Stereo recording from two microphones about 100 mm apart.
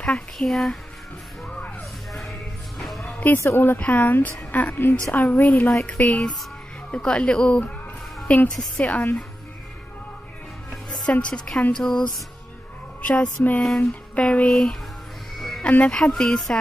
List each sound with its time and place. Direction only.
0.4 s speech: centre (ahead or behind)
1.5 s music: 15° left (ahead or behind)
3.2 s speech: 20° left (ahead or behind)
10.7 s music: 10° left (ahead or behind)
11.7 s speech: 5° left (ahead or behind)
13.0 s speech: 15° left (ahead or behind)
15.3 s music: centre (ahead or behind)
15.8 s speech: 5° left (ahead or behind)